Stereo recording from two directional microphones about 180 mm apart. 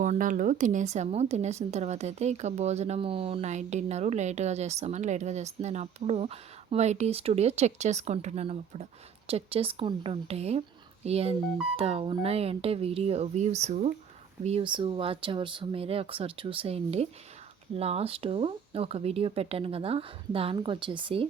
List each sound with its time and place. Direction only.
0.0 s speech: 45° right (ahead or behind); by 21.2 s 30° right (ahead or behind)